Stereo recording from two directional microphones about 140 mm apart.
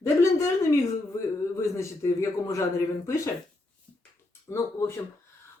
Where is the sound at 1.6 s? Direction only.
20° left (ahead or behind).